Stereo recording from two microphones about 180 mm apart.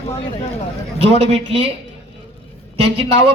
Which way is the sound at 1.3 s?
35° right (ahead or behind).